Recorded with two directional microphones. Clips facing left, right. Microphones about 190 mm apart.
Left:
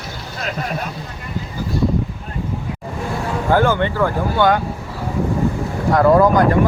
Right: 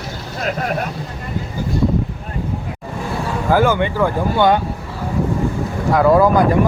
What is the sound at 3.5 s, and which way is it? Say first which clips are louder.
Speech: right 1 dB; 10° right (ahead or behind).